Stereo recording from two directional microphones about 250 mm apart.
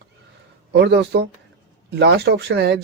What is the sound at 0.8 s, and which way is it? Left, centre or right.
Speech, right.